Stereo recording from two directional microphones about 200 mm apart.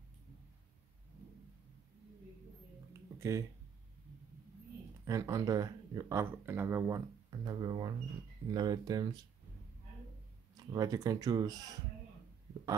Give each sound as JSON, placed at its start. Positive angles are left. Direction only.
{"t": 2.9, "sound": "a sound", "side_deg": -15}
{"t": 5.0, "sound": "speech", "side_deg": -15}
{"t": 10.7, "sound": "speech", "side_deg": -20}